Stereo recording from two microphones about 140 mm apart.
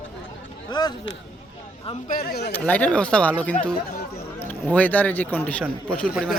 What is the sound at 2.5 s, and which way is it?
Speech, 10° left (ahead or behind).